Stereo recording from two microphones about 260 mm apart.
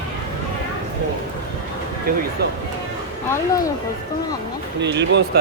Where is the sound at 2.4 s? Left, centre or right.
Right.